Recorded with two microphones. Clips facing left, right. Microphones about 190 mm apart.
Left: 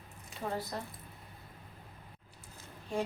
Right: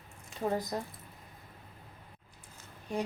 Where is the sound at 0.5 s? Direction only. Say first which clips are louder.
Right 3 dB; 15° right (ahead or behind).